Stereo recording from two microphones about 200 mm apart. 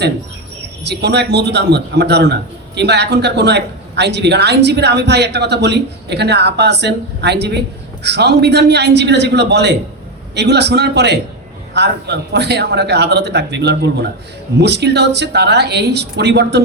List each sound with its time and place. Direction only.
0.9 s a man's voice: 55° right (ahead or behind)